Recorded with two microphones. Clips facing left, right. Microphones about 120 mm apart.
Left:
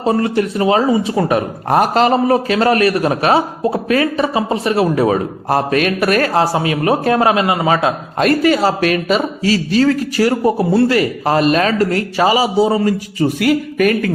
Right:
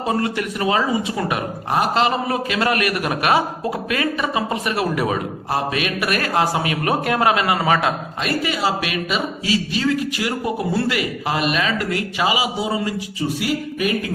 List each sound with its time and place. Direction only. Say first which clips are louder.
0.0 s speech: left 6 dB; 30° left (ahead or behind)
8.2 s speech: left 10 dB; 45° left (ahead or behind)